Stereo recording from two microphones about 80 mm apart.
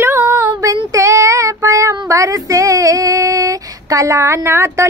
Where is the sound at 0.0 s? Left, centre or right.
Right.